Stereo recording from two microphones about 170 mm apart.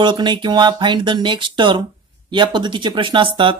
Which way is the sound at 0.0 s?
25° right (ahead or behind).